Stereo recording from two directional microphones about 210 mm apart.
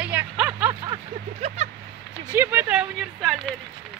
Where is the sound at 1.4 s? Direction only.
30° right (ahead or behind).